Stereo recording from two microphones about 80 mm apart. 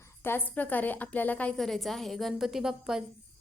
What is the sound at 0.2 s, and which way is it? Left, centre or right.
A woman's voice, left.